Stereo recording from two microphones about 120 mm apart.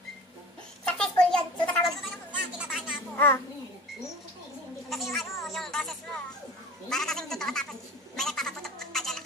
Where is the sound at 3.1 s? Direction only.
20° left (ahead or behind).